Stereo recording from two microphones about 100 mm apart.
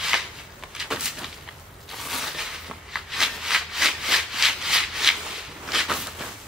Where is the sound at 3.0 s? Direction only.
5° right (ahead or behind).